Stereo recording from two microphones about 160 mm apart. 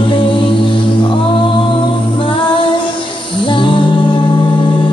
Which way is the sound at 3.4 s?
30° left (ahead or behind).